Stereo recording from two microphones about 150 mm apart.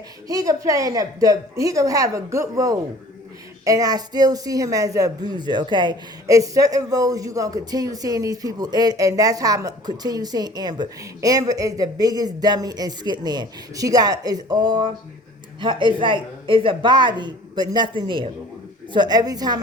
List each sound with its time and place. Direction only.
0.3 s a woman's voice: 25° right (ahead or behind)